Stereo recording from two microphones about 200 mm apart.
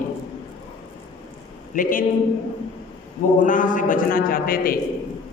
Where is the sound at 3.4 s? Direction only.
40° left (ahead or behind).